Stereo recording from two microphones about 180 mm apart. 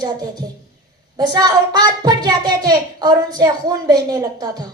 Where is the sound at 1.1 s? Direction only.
20° right (ahead or behind).